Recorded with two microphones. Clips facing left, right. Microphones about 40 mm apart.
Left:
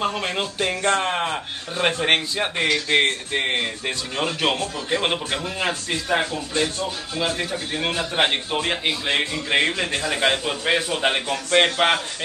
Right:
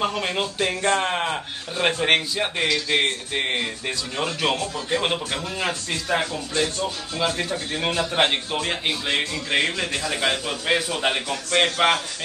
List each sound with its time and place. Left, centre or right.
0.2 s a man's voice: centre
2.7 s a man's voice: left